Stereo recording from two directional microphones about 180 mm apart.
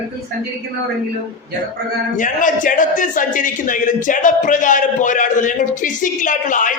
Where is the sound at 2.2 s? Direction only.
45° left (ahead or behind).